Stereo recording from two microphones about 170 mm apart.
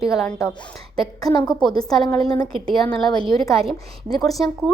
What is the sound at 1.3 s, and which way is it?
Speech, 25° left (ahead or behind).